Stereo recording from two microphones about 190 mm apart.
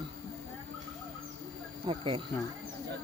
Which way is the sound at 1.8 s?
25° right (ahead or behind).